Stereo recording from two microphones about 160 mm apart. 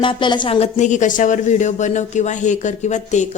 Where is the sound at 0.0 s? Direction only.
30° left (ahead or behind).